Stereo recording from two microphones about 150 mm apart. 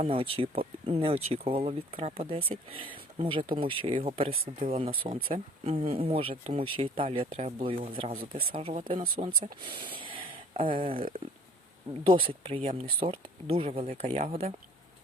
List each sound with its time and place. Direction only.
0.0 s speech: 40° right (ahead or behind)